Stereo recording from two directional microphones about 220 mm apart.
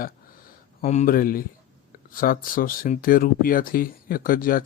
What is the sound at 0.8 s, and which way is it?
Speech, 35° left (ahead or behind).